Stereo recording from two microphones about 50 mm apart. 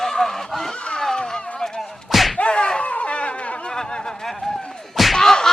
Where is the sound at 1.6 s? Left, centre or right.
Centre.